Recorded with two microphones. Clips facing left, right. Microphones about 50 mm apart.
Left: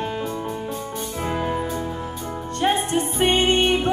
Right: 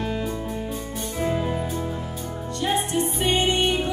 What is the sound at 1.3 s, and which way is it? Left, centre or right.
Music, left.